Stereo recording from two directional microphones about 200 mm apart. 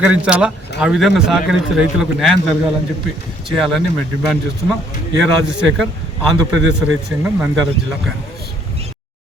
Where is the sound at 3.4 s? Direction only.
Centre (ahead or behind).